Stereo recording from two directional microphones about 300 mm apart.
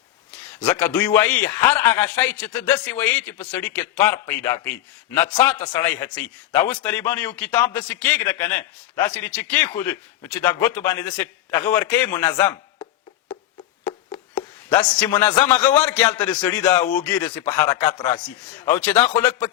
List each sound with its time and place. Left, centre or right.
0.6 s a man's voice: centre
12.5 s a sound: centre
13.8 s a man's voice: centre